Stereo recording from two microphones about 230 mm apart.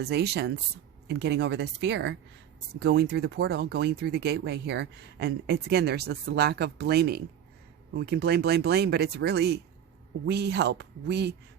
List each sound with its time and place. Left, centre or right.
0.0 s speech: right